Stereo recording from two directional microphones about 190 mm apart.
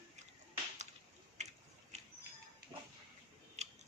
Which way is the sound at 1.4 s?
35° right (ahead or behind).